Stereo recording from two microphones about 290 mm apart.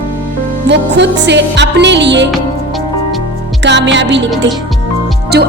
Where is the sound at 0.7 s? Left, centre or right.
Right.